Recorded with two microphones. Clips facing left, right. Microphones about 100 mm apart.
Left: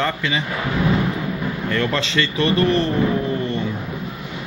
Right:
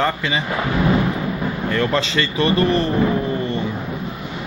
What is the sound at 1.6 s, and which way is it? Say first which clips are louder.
Speech: right 2 dB; 15° right (ahead or behind).